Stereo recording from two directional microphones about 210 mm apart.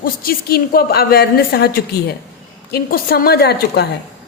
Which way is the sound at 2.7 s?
45° left (ahead or behind).